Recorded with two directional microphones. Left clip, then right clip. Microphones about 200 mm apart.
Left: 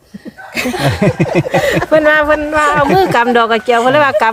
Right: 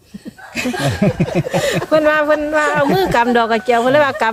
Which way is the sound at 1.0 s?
55° left (ahead or behind).